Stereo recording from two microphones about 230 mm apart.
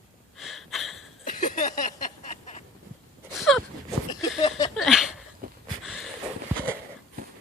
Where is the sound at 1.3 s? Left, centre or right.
Left.